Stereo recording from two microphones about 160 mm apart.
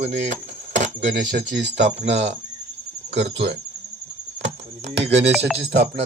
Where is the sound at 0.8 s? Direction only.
50° right (ahead or behind).